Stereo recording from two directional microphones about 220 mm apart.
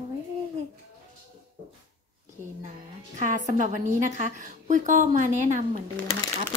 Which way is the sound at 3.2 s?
35° right (ahead or behind).